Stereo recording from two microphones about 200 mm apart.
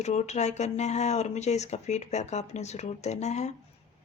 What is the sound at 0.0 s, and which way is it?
Speech, 35° left (ahead or behind).